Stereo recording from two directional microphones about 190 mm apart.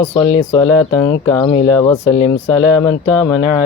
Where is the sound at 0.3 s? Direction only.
30° left (ahead or behind).